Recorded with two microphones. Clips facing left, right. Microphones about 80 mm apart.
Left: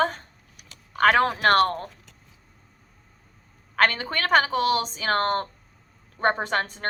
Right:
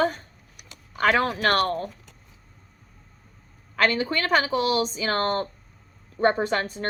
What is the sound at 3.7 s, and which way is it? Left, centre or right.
Speech, left.